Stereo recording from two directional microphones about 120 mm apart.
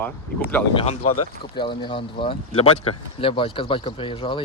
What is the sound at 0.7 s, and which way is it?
Speech, 65° left (ahead or behind).